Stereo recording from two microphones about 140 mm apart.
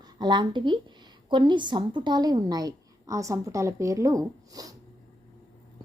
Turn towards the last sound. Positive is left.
turn(degrees=-25)  # may be behind; listen again after turning